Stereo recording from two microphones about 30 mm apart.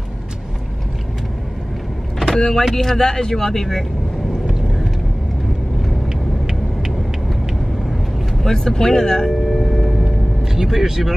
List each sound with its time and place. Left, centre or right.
2.3 s speech: centre
6.0 s vehicle: centre
8.4 s speech: centre
9.5 s a sound: centre
10.0 s vehicle: centre